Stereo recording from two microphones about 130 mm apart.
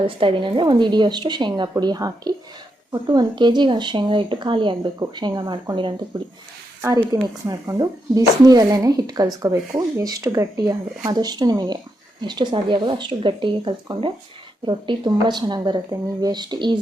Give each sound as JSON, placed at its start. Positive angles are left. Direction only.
{"t": 0.0, "sound": "speech", "side_deg": -40}
{"t": 7.4, "sound": "speech", "side_deg": -30}